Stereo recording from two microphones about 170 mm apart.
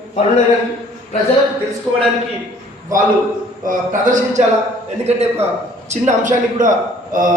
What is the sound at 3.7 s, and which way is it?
Speech, 50° right (ahead or behind).